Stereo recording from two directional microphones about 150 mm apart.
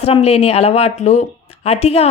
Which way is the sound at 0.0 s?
45° left (ahead or behind).